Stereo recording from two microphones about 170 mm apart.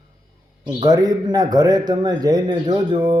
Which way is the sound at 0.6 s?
25° right (ahead or behind).